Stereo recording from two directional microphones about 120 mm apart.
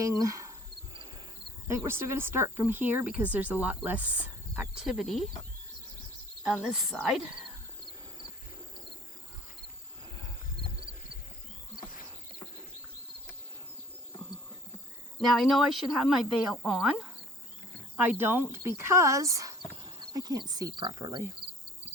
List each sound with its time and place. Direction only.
0.0 s speech: 25° right (ahead or behind)
1.6 s speech: 20° right (ahead or behind); by 5.3 s centre (ahead or behind)
6.4 s speech: 5° right (ahead or behind)
15.2 s speech: centre (ahead or behind)
17.9 s speech: 15° right (ahead or behind); by 21.2 s 35° right (ahead or behind)